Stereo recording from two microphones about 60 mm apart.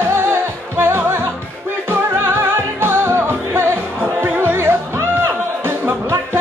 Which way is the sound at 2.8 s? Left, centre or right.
Right.